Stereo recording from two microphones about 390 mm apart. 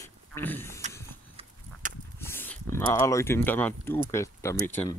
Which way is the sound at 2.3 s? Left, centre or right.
Centre.